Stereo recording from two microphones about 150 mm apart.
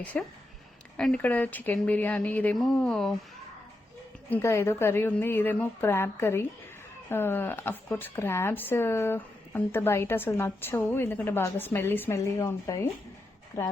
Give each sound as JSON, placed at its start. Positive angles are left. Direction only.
{"t": 0.0, "sound": "speech", "side_deg": 10}
{"t": 4.3, "sound": "speech", "side_deg": 15}